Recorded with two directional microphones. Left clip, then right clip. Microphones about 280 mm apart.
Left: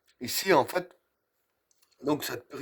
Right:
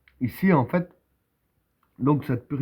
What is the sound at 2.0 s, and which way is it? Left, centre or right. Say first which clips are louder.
Speech: right 5 dB; left.